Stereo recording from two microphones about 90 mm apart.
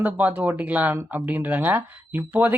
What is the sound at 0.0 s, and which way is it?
Speech, 15° right (ahead or behind).